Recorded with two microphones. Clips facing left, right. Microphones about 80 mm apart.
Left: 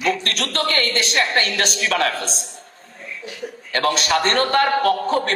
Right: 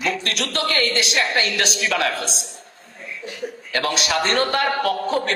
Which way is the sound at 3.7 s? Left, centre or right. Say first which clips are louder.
Left 3 dB; left.